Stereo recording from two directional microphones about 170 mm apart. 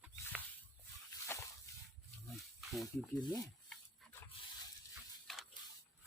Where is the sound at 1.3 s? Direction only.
15° left (ahead or behind).